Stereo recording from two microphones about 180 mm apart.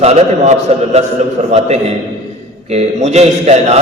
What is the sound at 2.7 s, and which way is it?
A man's voice, 35° right (ahead or behind).